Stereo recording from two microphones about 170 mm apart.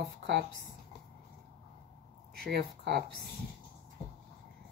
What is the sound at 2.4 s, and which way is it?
Speech, 75° right (ahead or behind).